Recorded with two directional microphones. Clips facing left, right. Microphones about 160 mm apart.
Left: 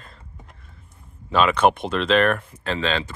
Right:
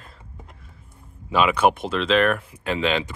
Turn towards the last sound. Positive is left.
turn(degrees=-15)  # may be behind; listen again after turning